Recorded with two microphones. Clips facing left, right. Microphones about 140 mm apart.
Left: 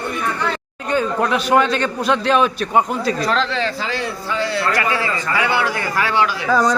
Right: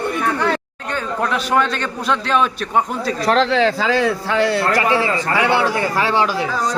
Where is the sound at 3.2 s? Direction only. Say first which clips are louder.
Right 5 dB; 70° right (ahead or behind).